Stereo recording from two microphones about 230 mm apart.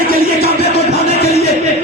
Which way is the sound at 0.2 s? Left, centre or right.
Left.